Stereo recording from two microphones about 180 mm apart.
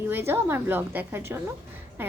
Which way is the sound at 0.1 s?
10° right (ahead or behind).